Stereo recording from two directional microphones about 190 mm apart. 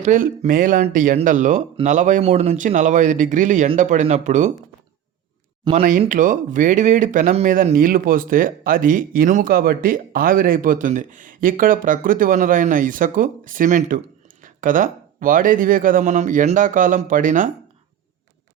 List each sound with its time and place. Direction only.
0.0 s speech: 45° right (ahead or behind)
5.7 s speech: 20° right (ahead or behind)
6.0 s speech: 45° right (ahead or behind)